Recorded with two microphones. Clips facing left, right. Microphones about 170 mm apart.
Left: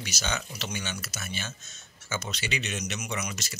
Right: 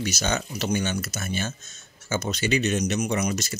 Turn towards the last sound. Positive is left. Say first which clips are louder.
# right 9 dB
turn(degrees=-45)  # may be behind; listen again after turning